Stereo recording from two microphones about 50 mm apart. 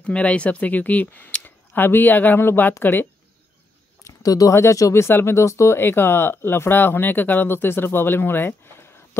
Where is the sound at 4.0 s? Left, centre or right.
Left.